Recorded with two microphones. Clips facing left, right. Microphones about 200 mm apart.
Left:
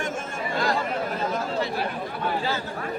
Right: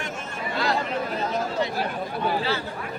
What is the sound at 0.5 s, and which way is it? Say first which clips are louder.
Chatter: even; 50° left (ahead or behind).